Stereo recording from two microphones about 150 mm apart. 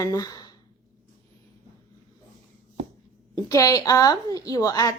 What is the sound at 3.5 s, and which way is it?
A woman's voice, 20° left (ahead or behind).